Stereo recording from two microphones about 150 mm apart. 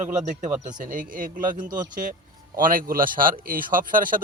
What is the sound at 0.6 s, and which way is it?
A man's voice, 60° right (ahead or behind).